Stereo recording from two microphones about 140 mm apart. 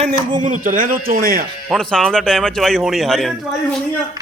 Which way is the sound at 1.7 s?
5° left (ahead or behind).